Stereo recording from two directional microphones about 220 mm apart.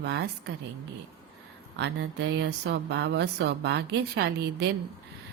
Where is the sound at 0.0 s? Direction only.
50° right (ahead or behind).